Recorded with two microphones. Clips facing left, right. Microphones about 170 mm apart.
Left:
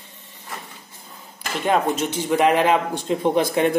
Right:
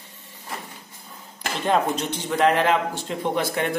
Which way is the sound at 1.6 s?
10° left (ahead or behind).